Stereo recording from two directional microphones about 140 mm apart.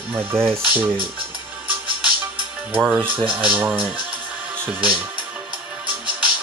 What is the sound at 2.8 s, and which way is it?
Speech, 10° right (ahead or behind).